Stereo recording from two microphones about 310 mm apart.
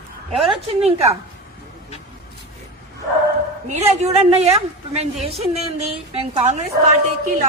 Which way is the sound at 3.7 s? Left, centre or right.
Right.